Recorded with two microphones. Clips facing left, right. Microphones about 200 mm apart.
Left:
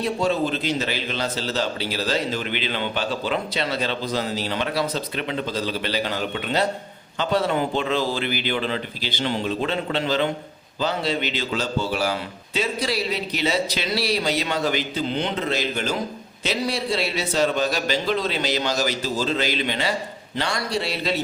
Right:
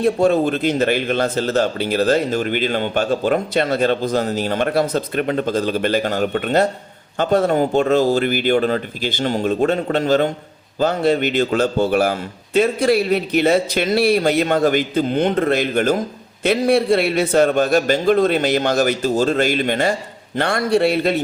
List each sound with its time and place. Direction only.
0.0 s a man's voice: 50° right (ahead or behind)